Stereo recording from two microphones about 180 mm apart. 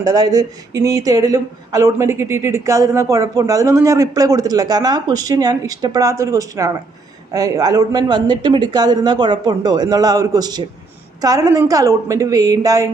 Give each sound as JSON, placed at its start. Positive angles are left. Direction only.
{"t": 0.0, "sound": "speech", "side_deg": -20}